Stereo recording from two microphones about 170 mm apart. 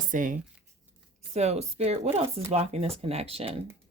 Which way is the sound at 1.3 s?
40° right (ahead or behind).